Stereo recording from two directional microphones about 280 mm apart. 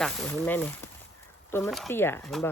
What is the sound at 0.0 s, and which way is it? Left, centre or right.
Speech, centre.